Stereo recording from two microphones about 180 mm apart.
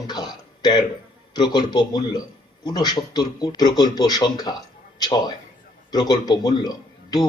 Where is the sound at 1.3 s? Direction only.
25° left (ahead or behind).